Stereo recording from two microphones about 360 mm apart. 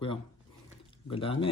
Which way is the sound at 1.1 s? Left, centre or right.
Centre.